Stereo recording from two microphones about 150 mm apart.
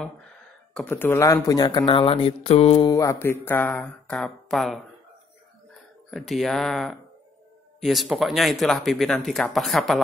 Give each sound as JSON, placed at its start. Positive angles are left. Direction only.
{"t": 0.7, "sound": "speech", "side_deg": 15}
{"t": 2.9, "sound": "speech", "side_deg": 20}
{"t": 6.0, "sound": "speech", "side_deg": 0}